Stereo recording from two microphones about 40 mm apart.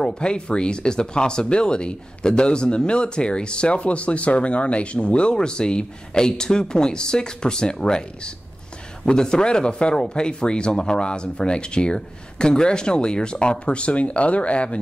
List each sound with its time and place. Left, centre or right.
0.0 s speech: left